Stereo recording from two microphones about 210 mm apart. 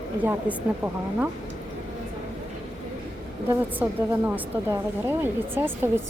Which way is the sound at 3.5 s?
10° right (ahead or behind).